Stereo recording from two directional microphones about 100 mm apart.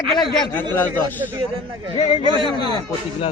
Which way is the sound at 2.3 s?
55° right (ahead or behind).